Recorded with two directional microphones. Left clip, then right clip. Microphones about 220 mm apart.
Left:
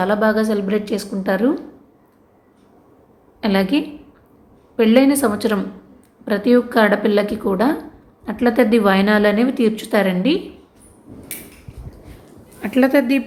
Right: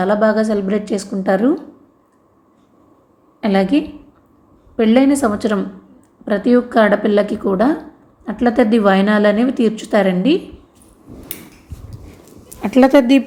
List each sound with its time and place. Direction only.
0.0 s a woman's voice: 5° right (ahead or behind)
3.4 s a woman's voice: 5° right (ahead or behind)
12.6 s a woman's voice: 20° right (ahead or behind)